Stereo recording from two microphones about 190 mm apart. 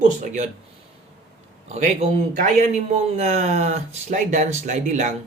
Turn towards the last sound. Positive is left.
turn(degrees=-40)  # may be behind; listen again after turning